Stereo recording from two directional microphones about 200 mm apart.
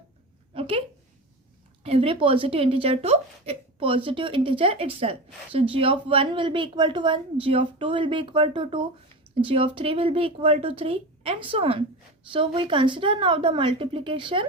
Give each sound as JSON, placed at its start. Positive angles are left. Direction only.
{"t": 1.8, "sound": "a woman's voice", "side_deg": -30}